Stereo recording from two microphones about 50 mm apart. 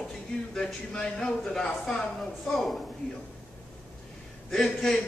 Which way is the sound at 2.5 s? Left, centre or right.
Centre.